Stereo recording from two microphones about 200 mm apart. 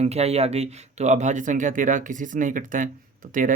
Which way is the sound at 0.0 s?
30° right (ahead or behind).